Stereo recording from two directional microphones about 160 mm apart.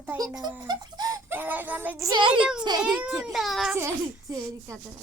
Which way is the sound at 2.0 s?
30° right (ahead or behind).